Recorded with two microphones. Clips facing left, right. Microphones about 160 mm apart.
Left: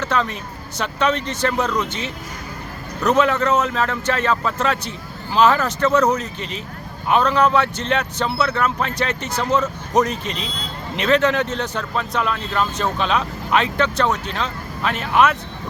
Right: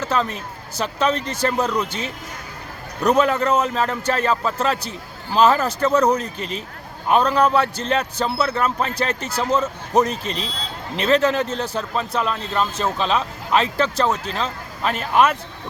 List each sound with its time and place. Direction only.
0.0 s speech: 35° right (ahead or behind)
1.6 s speech: 10° right (ahead or behind)
3.0 s speech: 35° right (ahead or behind)